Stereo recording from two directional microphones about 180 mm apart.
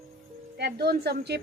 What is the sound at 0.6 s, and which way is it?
Speech, 60° right (ahead or behind).